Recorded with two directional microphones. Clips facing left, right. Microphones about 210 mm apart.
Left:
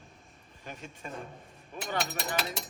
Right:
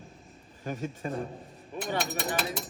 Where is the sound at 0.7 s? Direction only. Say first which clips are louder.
Right 9 dB; 35° right (ahead or behind).